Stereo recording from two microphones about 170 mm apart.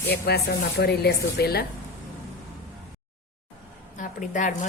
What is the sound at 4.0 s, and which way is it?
Speech, 50° left (ahead or behind).